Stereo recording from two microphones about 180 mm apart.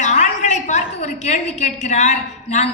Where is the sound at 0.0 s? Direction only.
40° left (ahead or behind).